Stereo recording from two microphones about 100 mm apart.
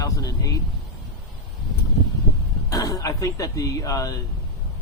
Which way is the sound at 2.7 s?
35° left (ahead or behind).